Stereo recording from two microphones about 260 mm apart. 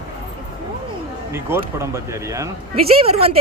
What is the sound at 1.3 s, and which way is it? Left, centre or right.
Speech, centre.